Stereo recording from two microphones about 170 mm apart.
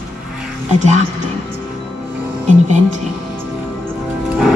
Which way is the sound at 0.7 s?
45° right (ahead or behind).